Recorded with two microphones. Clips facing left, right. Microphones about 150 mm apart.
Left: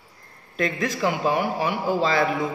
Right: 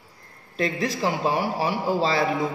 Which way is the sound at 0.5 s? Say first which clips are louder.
Even; 35° right (ahead or behind).